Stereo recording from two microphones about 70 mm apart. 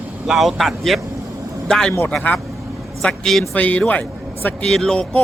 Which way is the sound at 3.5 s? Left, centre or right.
Left.